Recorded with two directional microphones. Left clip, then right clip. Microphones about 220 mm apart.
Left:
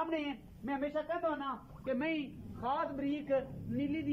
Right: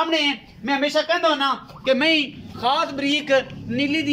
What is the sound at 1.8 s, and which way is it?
A man's voice, 30° right (ahead or behind).